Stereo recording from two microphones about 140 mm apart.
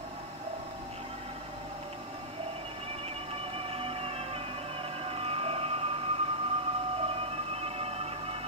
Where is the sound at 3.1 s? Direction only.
45° right (ahead or behind).